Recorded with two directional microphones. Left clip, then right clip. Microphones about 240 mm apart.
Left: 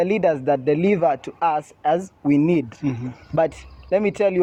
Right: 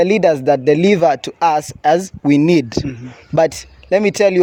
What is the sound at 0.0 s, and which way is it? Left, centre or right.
Speech, right.